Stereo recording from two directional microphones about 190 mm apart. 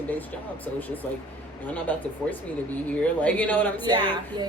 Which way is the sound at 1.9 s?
10° left (ahead or behind).